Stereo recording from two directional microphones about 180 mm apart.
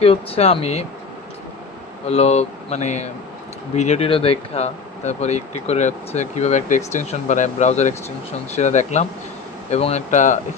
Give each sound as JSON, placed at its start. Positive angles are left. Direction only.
{"t": 0.0, "sound": "speech", "side_deg": 30}
{"t": 2.0, "sound": "speech", "side_deg": 35}